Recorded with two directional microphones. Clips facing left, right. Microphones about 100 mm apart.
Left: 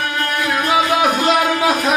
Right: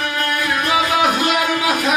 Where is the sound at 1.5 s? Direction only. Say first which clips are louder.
Left 2 dB; 35° left (ahead or behind).